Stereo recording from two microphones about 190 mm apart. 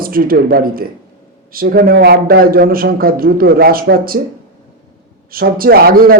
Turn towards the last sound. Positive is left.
turn(degrees=-50)  # may be behind; listen again after turning